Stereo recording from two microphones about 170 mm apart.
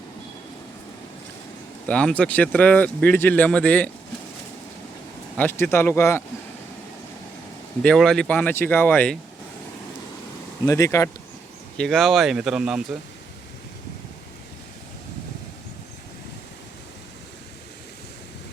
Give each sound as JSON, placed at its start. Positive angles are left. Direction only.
{"t": 1.9, "sound": "speech", "side_deg": 5}
{"t": 5.4, "sound": "speech", "side_deg": 15}
{"t": 7.8, "sound": "speech", "side_deg": 5}
{"t": 10.7, "sound": "speech", "side_deg": 20}
{"t": 11.8, "sound": "speech", "side_deg": 0}